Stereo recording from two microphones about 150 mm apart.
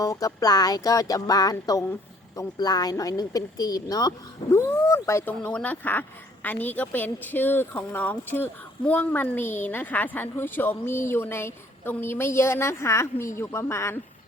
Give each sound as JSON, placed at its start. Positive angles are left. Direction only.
{"t": 0.0, "sound": "music", "side_deg": 20}
{"t": 4.5, "sound": "a woman's voice", "side_deg": 20}